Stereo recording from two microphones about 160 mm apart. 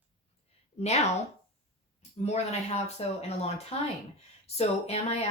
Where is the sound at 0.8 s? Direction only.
45° left (ahead or behind).